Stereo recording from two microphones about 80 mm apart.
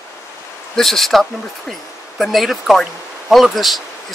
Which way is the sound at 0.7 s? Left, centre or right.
Centre.